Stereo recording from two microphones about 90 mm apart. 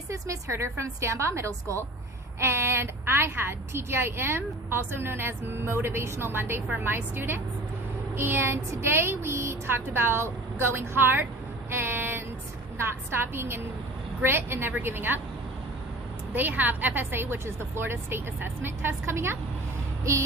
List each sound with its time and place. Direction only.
0.1 s a woman's voice: 35° right (ahead or behind)
11.7 s a sound: 25° right (ahead or behind)
13.3 s a woman's voice: 25° right (ahead or behind)
16.3 s a woman's voice: 20° right (ahead or behind)